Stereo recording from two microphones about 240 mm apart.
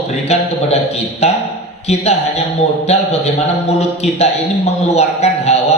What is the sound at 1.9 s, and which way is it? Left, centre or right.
Speech, left.